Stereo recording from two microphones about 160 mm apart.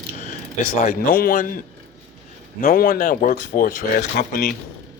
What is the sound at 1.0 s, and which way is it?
Speech, 65° left (ahead or behind).